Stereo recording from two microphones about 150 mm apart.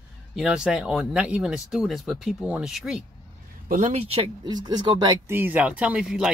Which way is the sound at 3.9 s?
40° right (ahead or behind).